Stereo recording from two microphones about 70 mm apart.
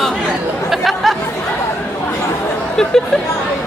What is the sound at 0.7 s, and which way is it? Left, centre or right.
Chatter, centre.